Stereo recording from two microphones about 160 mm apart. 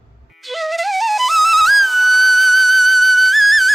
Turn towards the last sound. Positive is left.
turn(degrees=0)  # may be behind; listen again after turning